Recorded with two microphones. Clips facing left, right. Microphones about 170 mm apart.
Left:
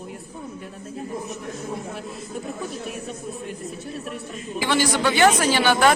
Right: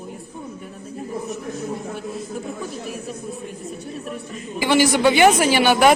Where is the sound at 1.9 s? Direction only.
Centre (ahead or behind).